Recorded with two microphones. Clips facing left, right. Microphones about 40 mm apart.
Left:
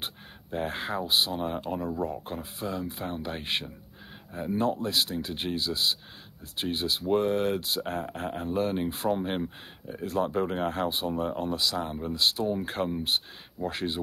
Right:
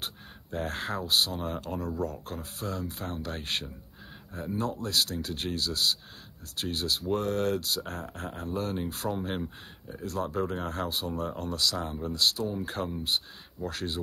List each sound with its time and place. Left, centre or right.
0.0 s a sound: left
0.7 s speech: centre
4.6 s speech: left
4.8 s speech: centre